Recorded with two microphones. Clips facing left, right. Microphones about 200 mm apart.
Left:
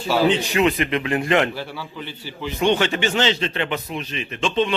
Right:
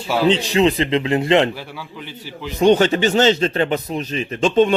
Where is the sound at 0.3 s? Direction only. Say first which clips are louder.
Right 3 dB; 30° right (ahead or behind).